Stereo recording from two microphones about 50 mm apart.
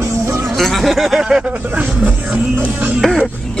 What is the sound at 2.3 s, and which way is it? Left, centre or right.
Music, right.